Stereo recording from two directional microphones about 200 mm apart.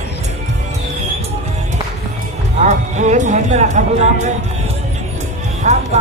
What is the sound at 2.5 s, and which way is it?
Speech, 35° right (ahead or behind).